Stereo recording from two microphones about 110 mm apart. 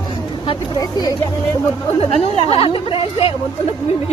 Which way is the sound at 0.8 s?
35° left (ahead or behind).